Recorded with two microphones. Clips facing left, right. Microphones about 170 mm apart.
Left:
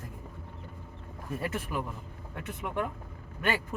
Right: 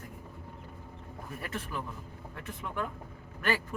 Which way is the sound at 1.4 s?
25° left (ahead or behind).